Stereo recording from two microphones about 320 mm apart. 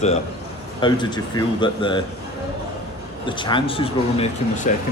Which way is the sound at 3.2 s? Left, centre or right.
Centre.